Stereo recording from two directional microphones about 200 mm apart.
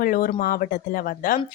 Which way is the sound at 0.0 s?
45° left (ahead or behind).